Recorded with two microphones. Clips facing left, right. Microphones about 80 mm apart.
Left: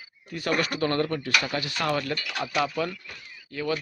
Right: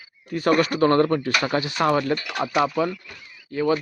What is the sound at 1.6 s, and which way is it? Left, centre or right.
Speech, right.